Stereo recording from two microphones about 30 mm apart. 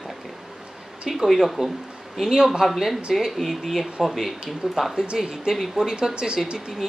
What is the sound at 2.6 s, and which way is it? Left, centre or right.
Speech, centre.